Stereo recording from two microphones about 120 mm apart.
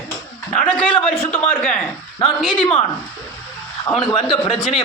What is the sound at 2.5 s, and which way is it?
Speech, 40° left (ahead or behind).